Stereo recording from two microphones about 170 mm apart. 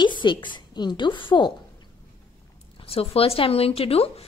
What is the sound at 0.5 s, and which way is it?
A woman's voice, 25° left (ahead or behind).